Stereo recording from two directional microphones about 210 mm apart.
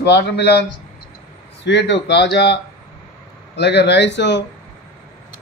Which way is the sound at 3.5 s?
55° left (ahead or behind).